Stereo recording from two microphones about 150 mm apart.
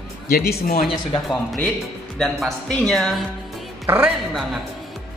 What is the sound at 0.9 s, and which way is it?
A woman's voice, centre (ahead or behind).